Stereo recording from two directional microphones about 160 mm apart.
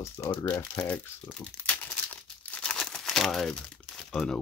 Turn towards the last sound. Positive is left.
turn(degrees=5)  # may be behind; listen again after turning